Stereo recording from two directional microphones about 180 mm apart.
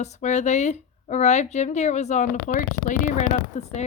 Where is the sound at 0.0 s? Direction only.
40° left (ahead or behind).